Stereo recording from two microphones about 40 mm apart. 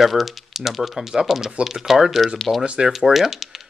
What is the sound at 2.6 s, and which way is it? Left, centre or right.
Speech, right.